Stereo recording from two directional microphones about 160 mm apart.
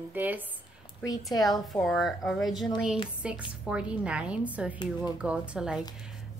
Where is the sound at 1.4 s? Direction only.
Centre (ahead or behind).